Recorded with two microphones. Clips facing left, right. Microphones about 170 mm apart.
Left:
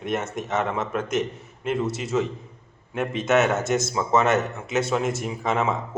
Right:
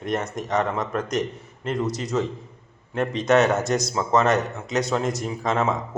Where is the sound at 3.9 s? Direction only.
5° left (ahead or behind).